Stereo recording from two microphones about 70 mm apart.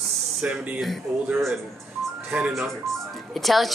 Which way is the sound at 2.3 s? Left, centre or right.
Centre.